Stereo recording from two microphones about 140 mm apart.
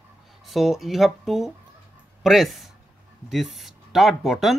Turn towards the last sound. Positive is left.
turn(degrees=0)  # may be behind; listen again after turning